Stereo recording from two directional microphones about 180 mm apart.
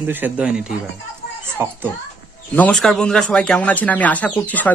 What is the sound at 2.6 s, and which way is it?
Speech, 5° left (ahead or behind).